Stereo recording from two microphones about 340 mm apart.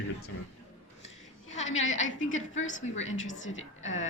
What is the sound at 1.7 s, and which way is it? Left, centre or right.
Speech, left.